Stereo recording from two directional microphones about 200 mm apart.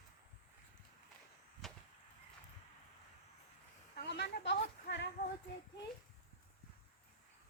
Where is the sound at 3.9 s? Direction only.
60° left (ahead or behind).